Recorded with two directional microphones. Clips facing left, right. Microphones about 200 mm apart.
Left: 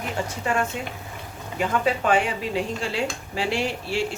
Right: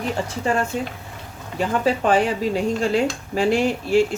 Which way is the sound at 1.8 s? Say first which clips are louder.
Right 4 dB; 35° right (ahead or behind).